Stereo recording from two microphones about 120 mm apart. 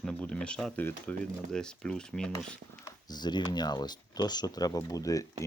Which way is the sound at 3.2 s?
35° left (ahead or behind).